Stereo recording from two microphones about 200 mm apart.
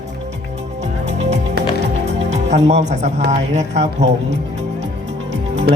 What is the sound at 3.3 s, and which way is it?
Speech, 35° right (ahead or behind).